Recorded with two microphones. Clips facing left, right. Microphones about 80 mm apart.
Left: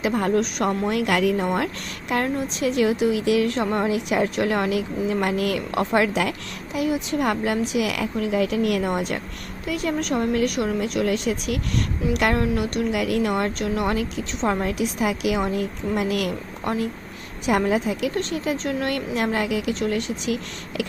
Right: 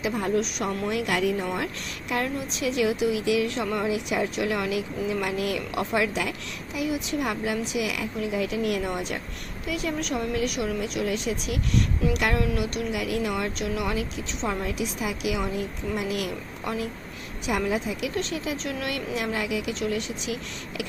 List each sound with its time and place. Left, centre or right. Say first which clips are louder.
0.0 s a woman's voice: left 4 dB; left
12.9 s a woman's voice: left 5 dB; left
17.7 s a woman's voice: left 5 dB; left